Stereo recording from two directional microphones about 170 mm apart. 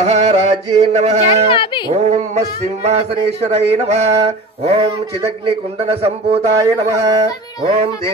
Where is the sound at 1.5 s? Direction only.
30° left (ahead or behind).